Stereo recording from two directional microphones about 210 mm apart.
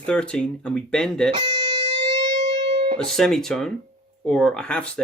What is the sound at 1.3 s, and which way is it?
Music, 25° right (ahead or behind).